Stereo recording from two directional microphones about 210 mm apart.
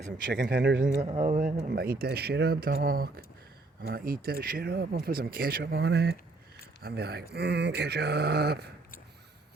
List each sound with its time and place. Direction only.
0.3 s speech: 50° right (ahead or behind)
1.2 s speech: 40° right (ahead or behind)